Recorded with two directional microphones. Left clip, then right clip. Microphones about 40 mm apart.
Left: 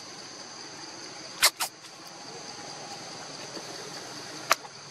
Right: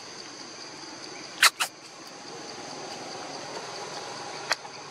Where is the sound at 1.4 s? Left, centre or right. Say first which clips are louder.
Right 4 dB; centre.